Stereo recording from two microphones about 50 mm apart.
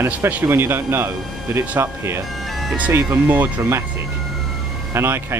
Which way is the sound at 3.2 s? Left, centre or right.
Right.